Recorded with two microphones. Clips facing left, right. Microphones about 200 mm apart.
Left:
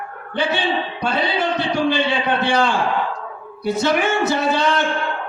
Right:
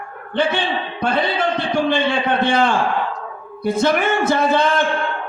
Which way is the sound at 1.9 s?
50° right (ahead or behind).